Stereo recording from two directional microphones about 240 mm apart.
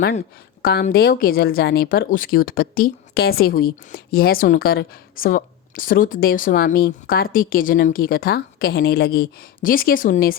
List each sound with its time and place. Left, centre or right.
0.6 s speech: left